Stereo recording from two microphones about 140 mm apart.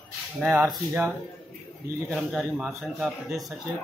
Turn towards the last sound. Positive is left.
turn(degrees=0)  # may be behind; listen again after turning